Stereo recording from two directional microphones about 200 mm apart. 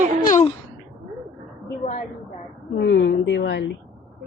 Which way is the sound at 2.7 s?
60° left (ahead or behind).